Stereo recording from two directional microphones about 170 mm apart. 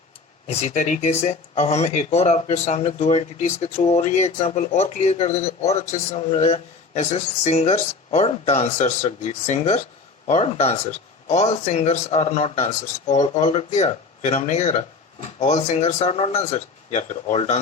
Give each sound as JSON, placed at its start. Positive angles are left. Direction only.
{"t": 0.4, "sound": "speech", "side_deg": 40}